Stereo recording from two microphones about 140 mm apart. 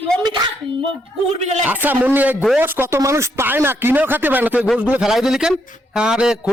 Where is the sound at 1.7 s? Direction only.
10° right (ahead or behind).